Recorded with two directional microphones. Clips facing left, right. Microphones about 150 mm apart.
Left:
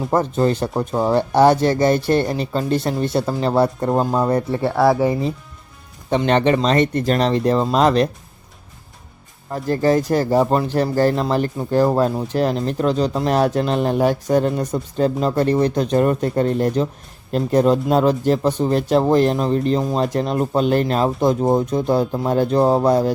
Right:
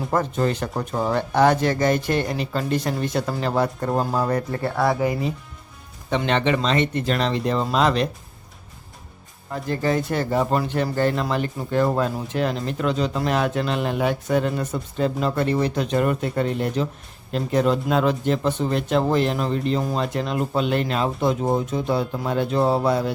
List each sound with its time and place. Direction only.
0.1 s speech: 30° left (ahead or behind)
4.5 s speech: 5° left (ahead or behind)
6.1 s speech: 40° left (ahead or behind)
9.5 s speech: 40° left (ahead or behind)
10.4 s speech: 25° left (ahead or behind)
10.7 s speech: 35° left (ahead or behind)
11.1 s speech: 25° left (ahead or behind)
11.3 s speech: 35° left (ahead or behind)